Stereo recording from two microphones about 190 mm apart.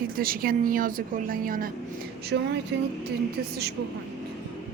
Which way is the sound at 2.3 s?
70° right (ahead or behind).